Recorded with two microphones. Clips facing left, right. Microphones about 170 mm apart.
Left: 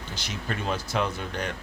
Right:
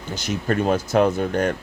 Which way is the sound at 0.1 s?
45° right (ahead or behind).